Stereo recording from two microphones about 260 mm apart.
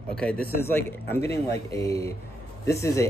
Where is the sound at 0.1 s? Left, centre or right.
Centre.